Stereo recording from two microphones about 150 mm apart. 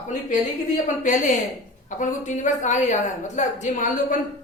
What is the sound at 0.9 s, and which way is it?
A woman's voice, 60° left (ahead or behind).